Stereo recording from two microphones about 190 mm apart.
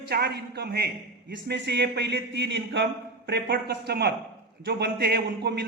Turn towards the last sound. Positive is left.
turn(degrees=-60)  # may be behind; listen again after turning